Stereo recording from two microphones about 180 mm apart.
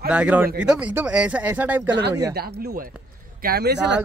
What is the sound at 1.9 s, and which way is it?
Speech, 70° right (ahead or behind).